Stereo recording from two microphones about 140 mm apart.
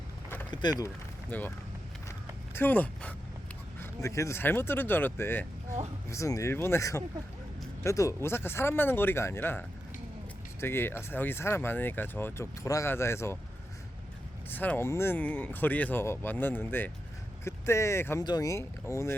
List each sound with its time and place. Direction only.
0.5 s speech: 30° left (ahead or behind)
1.3 s speech: 10° left (ahead or behind)
2.6 s speech: 10° left (ahead or behind)
3.8 s speech: 20° left (ahead or behind)
14.5 s speech: 15° left (ahead or behind)